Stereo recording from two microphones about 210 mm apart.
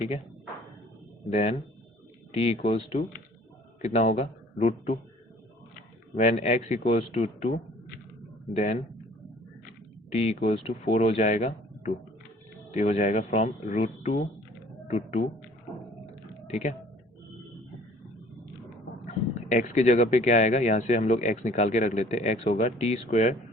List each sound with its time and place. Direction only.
1.3 s speech: 35° left (ahead or behind)
6.1 s speech: 35° left (ahead or behind)
8.5 s speech: 35° left (ahead or behind)
10.2 s speech: 30° left (ahead or behind)
12.7 s speech: 35° left (ahead or behind)
16.5 s speech: 35° left (ahead or behind)
19.5 s speech: 35° left (ahead or behind)